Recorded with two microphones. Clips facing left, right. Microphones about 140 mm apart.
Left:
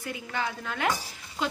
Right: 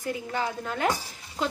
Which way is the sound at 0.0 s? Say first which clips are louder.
Right 3 dB; 35° right (ahead or behind).